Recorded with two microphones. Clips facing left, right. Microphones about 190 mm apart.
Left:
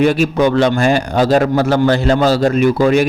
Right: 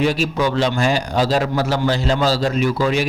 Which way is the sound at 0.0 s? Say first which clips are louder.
Left 6 dB; 55° left (ahead or behind).